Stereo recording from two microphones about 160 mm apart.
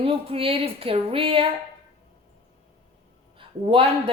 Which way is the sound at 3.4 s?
35° right (ahead or behind).